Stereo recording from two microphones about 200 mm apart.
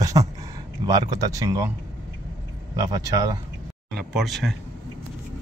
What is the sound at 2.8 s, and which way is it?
Speech, 15° right (ahead or behind).